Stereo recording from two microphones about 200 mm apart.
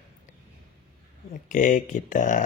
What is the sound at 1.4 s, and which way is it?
Speech, 40° left (ahead or behind).